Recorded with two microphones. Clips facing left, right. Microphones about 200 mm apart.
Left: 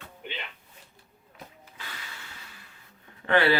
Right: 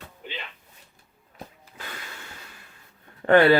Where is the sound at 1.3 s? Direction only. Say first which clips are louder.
Right 4 dB; 45° right (ahead or behind).